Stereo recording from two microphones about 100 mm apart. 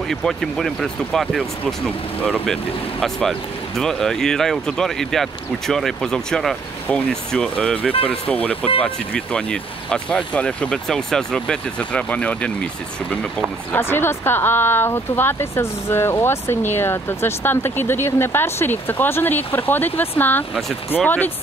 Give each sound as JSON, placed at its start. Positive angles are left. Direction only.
{"t": 0.1, "sound": "speech", "side_deg": 5}
{"t": 7.9, "sound": "speech", "side_deg": 70}
{"t": 8.3, "sound": "speech", "side_deg": 15}
{"t": 13.7, "sound": "speech", "side_deg": 20}